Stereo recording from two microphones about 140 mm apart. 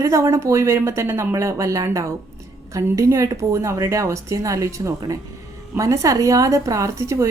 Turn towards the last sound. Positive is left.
turn(degrees=-20)  # may be behind; listen again after turning